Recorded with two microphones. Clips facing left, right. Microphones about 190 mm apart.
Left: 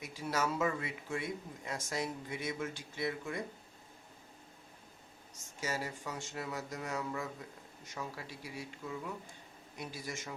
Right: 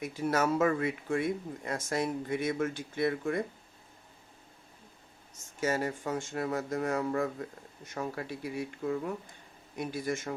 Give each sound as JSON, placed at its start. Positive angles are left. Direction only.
{"t": 0.0, "sound": "speech", "side_deg": -55}
{"t": 5.5, "sound": "speech", "side_deg": -55}